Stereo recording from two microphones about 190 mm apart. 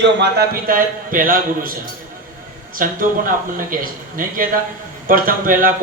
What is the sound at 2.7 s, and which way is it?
Speech, 45° right (ahead or behind).